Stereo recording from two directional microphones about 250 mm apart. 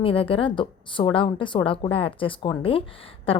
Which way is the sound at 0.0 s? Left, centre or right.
Left.